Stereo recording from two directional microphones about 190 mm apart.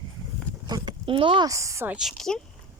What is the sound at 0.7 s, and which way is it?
Speech, 25° right (ahead or behind).